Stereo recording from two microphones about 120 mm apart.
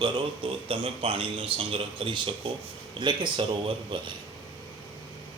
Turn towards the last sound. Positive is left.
turn(degrees=-45)  # may be behind; listen again after turning